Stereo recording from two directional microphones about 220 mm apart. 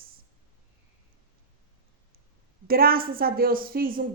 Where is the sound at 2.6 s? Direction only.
40° right (ahead or behind).